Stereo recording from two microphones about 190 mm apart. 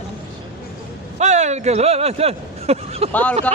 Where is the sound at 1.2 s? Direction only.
35° right (ahead or behind).